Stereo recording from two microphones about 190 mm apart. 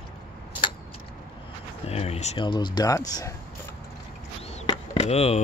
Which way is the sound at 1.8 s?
35° left (ahead or behind).